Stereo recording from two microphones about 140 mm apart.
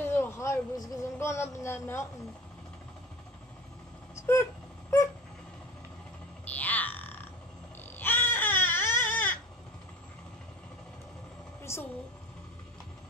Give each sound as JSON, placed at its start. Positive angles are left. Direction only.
{"t": 0.0, "sound": "speech", "side_deg": 15}
{"t": 4.1, "sound": "a sound", "side_deg": 20}
{"t": 6.4, "sound": "music", "side_deg": 10}
{"t": 8.0, "sound": "baby cry", "side_deg": 15}
{"t": 11.6, "sound": "music", "side_deg": 20}